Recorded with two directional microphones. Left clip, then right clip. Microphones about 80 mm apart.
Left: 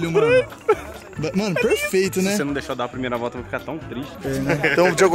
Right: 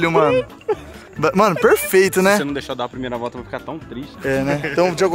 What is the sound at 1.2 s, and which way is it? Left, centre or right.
Speech, right.